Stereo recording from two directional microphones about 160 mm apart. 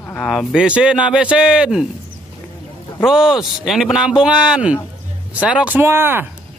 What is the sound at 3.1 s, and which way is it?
Speech, 5° right (ahead or behind).